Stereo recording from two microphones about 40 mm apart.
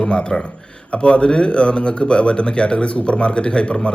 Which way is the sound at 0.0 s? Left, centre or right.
Left.